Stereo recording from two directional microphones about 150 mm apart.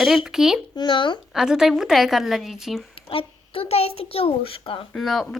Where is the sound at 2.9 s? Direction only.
40° left (ahead or behind).